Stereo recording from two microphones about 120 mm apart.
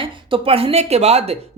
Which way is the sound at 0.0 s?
50° right (ahead or behind).